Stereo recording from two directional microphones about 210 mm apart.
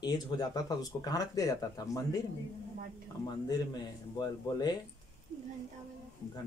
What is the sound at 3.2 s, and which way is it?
A man's voice, 20° left (ahead or behind).